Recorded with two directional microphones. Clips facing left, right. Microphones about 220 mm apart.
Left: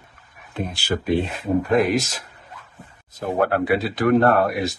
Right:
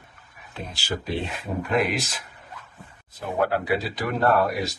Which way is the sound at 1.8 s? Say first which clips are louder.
Left 6 dB; 45° left (ahead or behind).